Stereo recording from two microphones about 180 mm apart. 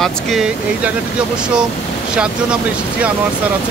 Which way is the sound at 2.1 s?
5° right (ahead or behind).